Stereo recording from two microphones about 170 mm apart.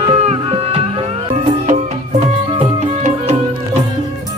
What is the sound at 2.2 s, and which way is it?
Music, 40° right (ahead or behind).